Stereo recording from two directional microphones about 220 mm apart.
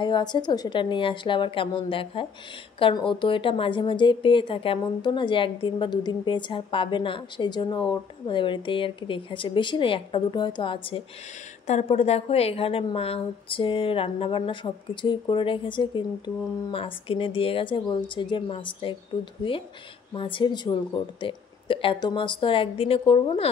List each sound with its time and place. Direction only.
0.0 s a woman's voice: 20° left (ahead or behind)
20.2 s a woman's voice: 20° left (ahead or behind)